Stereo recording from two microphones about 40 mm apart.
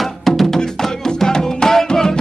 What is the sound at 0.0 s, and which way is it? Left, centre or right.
Music, centre.